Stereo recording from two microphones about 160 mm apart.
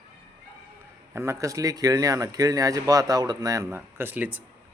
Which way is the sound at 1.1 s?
20° right (ahead or behind).